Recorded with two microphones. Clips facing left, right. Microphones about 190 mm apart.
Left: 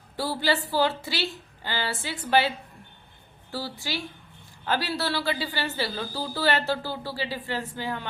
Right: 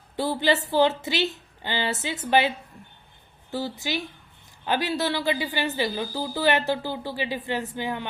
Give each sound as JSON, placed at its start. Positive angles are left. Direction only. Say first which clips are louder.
{"t": 0.2, "sound": "a woman's voice", "louder": "right 3 dB", "side_deg": -20}
{"t": 3.5, "sound": "a woman's voice", "louder": "right 4 dB", "side_deg": -20}